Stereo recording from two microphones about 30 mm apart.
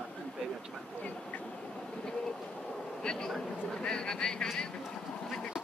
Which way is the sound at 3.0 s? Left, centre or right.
Left.